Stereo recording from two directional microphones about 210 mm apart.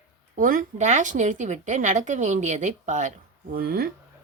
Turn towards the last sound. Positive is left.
turn(degrees=-45)  # may be behind; listen again after turning